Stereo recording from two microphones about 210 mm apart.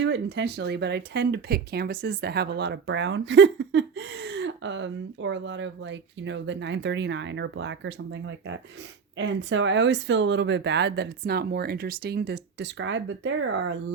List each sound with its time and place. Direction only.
0.0 s speech: 60° right (ahead or behind)